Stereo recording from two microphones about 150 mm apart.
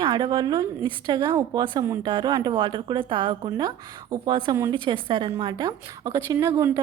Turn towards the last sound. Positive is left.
turn(degrees=-20)  # may be behind; listen again after turning